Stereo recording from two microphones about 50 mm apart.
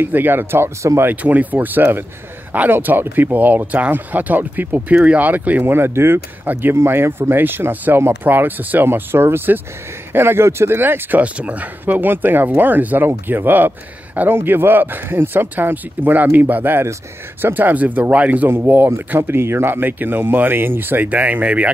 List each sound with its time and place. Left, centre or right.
0.0 s speech: right
1.2 s speech: right
5.7 s speech: right
6.4 s speech: right
6.7 s speech: right
10.8 s speech: right
11.1 s speech: right
18.5 s speech: right